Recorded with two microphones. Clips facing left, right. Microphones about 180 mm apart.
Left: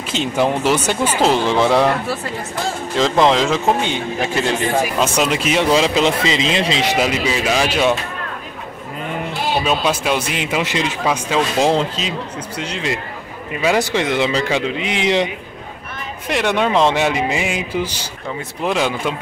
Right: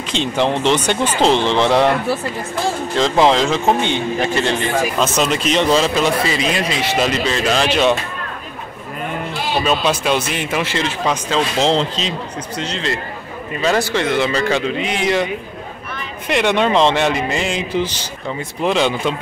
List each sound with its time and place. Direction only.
0.1 s speech: 5° left (ahead or behind); by 6.9 s 25° left (ahead or behind)
6.9 s speech: 10° left (ahead or behind)
9.6 s speech: 10° left (ahead or behind)
16.3 s speech: 5° left (ahead or behind)